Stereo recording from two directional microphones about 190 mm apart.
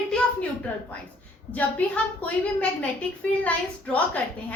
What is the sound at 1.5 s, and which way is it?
A woman's voice, 10° left (ahead or behind).